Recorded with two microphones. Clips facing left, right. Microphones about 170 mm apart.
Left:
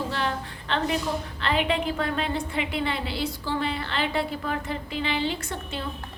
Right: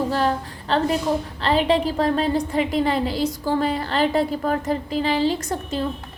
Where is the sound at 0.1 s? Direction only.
40° right (ahead or behind).